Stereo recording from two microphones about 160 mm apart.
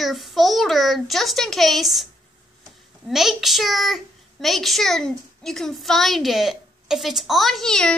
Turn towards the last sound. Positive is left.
turn(degrees=5)  # may be behind; listen again after turning